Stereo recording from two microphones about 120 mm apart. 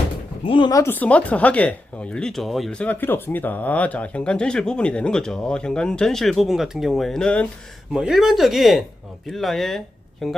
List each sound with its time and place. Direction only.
0.4 s speech: 45° left (ahead or behind)
0.7 s speech: 25° left (ahead or behind)
0.9 s speech: 10° left (ahead or behind)
7.9 s speech: 5° right (ahead or behind)